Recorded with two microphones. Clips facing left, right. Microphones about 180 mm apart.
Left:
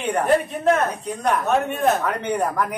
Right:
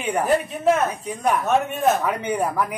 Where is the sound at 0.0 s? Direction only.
5° right (ahead or behind).